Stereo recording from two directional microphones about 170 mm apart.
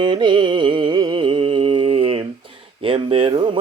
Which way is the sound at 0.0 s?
25° right (ahead or behind).